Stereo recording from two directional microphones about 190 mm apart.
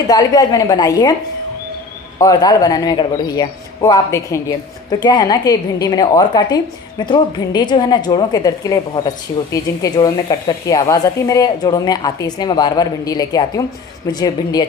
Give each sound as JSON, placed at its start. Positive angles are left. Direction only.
{"t": 0.1, "sound": "a woman's voice", "side_deg": 20}
{"t": 2.1, "sound": "a woman's voice", "side_deg": 20}